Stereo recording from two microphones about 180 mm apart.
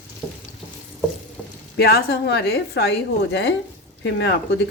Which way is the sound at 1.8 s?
60° left (ahead or behind).